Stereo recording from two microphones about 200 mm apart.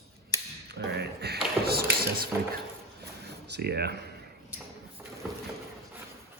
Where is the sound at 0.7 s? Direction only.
55° right (ahead or behind).